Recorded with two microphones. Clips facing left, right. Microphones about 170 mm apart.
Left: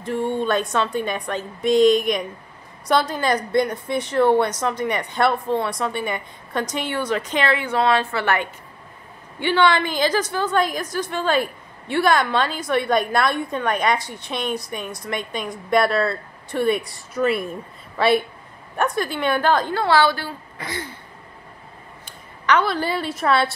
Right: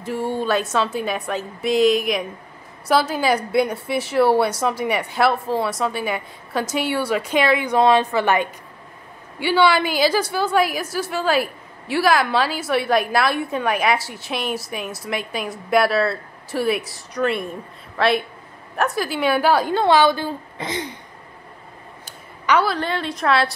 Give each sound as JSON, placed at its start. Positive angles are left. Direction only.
{"t": 0.0, "sound": "a woman's voice", "side_deg": -5}
{"t": 22.5, "sound": "a woman's voice", "side_deg": -10}
{"t": 22.8, "sound": "a woman's voice", "side_deg": 5}